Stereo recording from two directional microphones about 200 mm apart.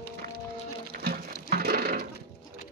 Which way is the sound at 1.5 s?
50° right (ahead or behind).